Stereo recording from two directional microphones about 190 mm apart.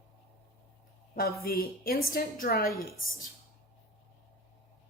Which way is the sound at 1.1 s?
50° left (ahead or behind).